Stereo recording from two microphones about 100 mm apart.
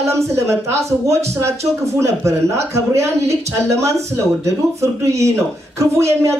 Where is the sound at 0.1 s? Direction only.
30° right (ahead or behind).